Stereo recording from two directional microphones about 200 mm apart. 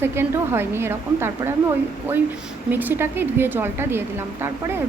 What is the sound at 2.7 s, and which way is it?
A woman's voice, 10° right (ahead or behind).